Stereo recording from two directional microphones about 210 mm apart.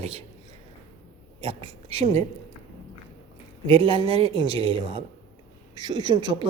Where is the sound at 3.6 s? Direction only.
25° right (ahead or behind).